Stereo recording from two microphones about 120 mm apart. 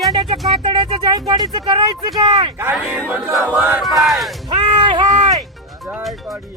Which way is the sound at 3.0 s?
15° right (ahead or behind).